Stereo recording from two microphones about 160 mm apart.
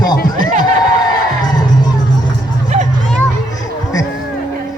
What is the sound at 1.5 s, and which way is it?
Music, 25° left (ahead or behind).